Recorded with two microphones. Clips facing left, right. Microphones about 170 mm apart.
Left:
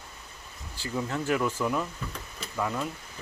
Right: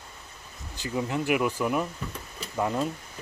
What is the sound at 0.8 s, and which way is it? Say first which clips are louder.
Speech: right 2 dB; 15° right (ahead or behind).